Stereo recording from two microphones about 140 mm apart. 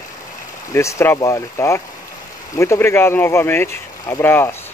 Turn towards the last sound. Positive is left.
turn(degrees=15)  # may be behind; listen again after turning